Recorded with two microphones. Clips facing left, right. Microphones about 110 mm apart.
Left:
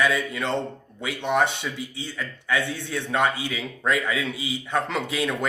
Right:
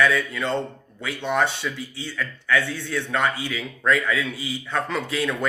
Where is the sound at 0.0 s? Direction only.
20° left (ahead or behind).